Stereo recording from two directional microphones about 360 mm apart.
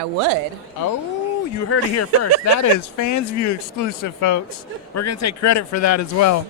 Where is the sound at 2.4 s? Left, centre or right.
Left.